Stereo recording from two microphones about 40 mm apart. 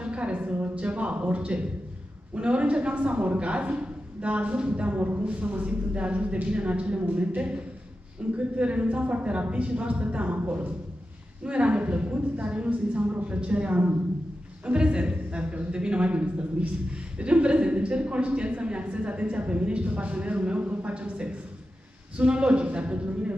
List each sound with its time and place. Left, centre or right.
0.0 s a woman's voice: right
11.4 s a woman's voice: right